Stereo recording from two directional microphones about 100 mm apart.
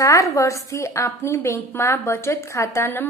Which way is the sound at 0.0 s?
35° left (ahead or behind).